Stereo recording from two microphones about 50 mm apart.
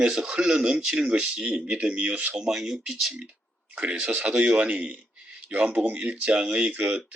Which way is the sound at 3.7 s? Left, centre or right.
Right.